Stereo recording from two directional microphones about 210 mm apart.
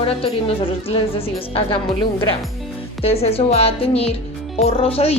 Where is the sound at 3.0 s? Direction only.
30° left (ahead or behind).